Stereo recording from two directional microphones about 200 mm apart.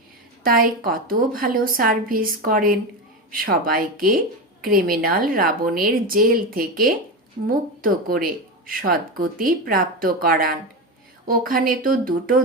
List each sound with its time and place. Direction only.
0.4 s speech: 45° right (ahead or behind)